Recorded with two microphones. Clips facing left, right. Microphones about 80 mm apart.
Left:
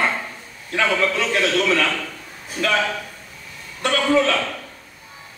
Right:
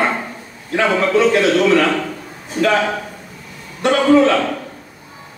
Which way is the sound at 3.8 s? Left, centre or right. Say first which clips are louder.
Right 6 dB; right.